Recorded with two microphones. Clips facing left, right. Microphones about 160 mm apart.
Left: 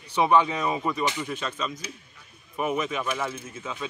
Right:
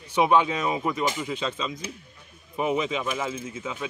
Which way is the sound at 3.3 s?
90° right.